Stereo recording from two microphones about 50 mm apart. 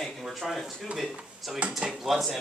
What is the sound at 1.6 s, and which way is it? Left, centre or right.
Speech, right.